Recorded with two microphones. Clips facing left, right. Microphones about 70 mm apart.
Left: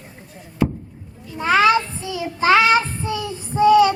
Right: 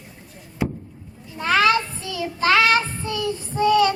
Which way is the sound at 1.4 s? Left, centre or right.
Centre.